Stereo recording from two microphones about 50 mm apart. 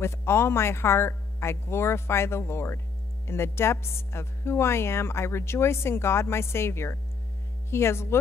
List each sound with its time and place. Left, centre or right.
0.0 s speech: left